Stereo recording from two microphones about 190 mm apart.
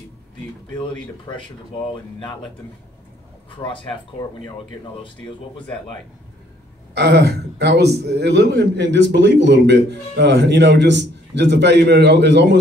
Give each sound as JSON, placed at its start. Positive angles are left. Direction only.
{"t": 1.3, "sound": "speech", "side_deg": 20}
{"t": 3.4, "sound": "speech", "side_deg": 25}
{"t": 6.9, "sound": "a man's voice", "side_deg": -60}